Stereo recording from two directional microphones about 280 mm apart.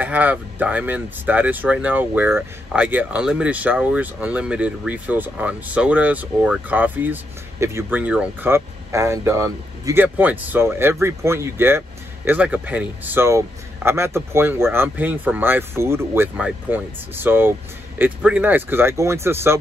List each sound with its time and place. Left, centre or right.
0.0 s speech: centre